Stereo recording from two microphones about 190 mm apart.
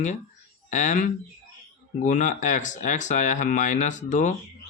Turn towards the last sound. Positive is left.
turn(degrees=40)  # may be behind; listen again after turning